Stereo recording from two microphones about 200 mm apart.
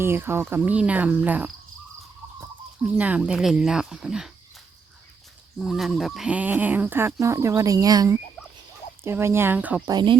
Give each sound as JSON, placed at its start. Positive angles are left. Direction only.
{"t": 0.0, "sound": "speech", "side_deg": -10}
{"t": 2.8, "sound": "speech", "side_deg": -5}
{"t": 5.5, "sound": "speech", "side_deg": 0}
{"t": 9.8, "sound": "speech", "side_deg": -20}